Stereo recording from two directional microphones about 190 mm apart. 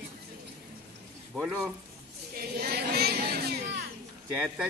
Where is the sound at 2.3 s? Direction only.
55° right (ahead or behind).